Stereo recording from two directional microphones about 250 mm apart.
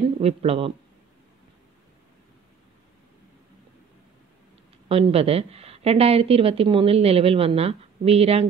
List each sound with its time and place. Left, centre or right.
0.2 s a woman's voice: right
4.8 s a woman's voice: right